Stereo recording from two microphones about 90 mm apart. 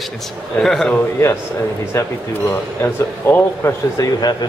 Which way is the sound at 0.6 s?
5° left (ahead or behind).